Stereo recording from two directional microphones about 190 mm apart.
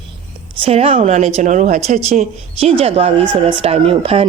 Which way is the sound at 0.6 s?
30° right (ahead or behind).